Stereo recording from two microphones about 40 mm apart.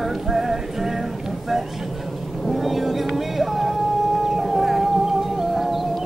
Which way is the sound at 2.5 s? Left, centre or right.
Centre.